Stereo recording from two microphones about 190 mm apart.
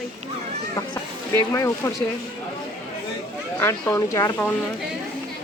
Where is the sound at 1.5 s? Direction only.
15° left (ahead or behind).